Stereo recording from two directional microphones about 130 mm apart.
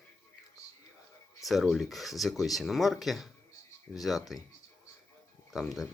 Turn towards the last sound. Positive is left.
turn(degrees=0)  # may be behind; listen again after turning